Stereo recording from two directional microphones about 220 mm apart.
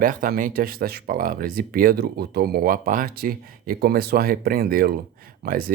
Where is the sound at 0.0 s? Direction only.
40° right (ahead or behind).